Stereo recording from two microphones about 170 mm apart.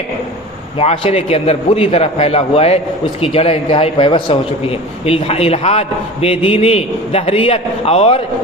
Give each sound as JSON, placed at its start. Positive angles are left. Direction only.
{"t": 0.8, "sound": "a man's voice", "side_deg": 35}